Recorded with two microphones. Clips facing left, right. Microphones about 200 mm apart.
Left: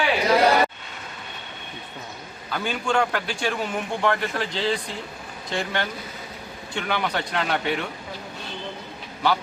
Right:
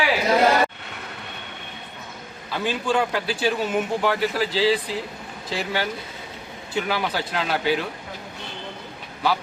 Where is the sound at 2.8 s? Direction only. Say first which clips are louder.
Even; 5° right (ahead or behind).